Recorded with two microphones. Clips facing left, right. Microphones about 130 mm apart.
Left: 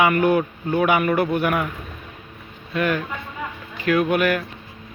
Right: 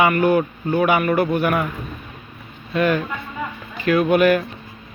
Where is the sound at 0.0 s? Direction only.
15° left (ahead or behind).